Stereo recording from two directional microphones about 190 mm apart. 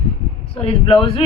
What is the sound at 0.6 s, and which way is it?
Speech, 30° left (ahead or behind).